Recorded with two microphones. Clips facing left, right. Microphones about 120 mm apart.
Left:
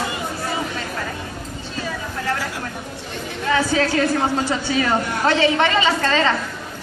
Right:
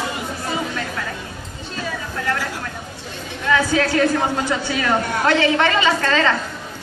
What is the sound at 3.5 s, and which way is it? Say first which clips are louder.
A woman's voice: right 1 dB; 30° left (ahead or behind).